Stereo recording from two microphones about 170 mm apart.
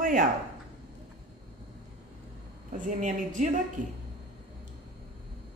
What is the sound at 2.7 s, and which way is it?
Speech, 45° right (ahead or behind).